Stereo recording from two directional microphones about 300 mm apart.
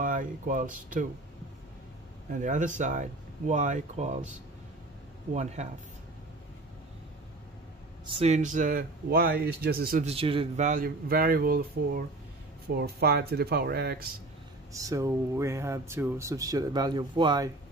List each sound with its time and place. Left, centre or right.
0.0 s speech: right
2.3 s speech: right
8.1 s speech: right
14.7 s speech: centre